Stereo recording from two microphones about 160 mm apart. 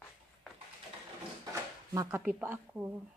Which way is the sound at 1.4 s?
20° right (ahead or behind).